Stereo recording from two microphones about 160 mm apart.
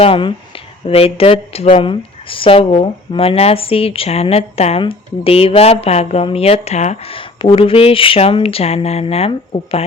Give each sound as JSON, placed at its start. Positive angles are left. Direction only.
{"t": 0.0, "sound": "speech", "side_deg": 30}